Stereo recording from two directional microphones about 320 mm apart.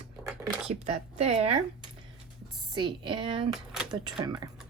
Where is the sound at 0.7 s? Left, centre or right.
Right.